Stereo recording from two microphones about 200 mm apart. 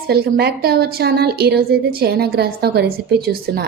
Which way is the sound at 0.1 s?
50° right (ahead or behind).